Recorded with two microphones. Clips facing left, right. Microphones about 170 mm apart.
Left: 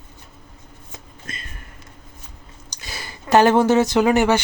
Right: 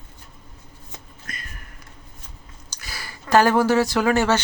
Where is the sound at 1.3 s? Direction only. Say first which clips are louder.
Left 2 dB; 25° left (ahead or behind).